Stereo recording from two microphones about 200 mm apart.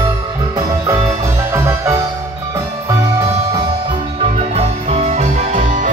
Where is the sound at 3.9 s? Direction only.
30° right (ahead or behind).